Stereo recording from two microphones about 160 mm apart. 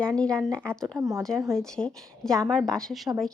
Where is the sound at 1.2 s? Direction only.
5° left (ahead or behind).